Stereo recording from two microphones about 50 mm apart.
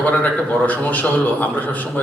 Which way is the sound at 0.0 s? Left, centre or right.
Left.